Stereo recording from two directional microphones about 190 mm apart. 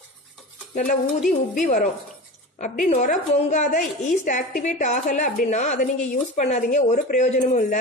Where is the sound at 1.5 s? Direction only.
40° left (ahead or behind).